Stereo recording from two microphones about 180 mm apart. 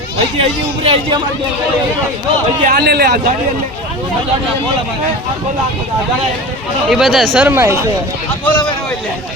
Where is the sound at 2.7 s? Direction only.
65° right (ahead or behind).